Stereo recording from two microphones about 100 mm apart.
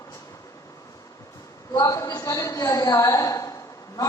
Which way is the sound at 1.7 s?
35° left (ahead or behind).